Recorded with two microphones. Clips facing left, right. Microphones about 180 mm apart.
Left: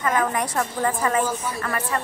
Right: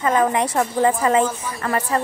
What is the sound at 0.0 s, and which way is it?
A woman's voice, 20° right (ahead or behind).